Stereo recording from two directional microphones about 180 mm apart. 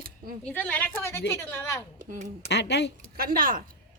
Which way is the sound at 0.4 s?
10° left (ahead or behind).